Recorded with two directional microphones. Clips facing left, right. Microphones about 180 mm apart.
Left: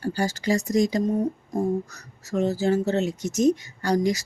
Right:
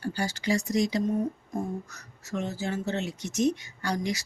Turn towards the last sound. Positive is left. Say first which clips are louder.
# left 7 dB
turn(degrees=40)  # may be behind; listen again after turning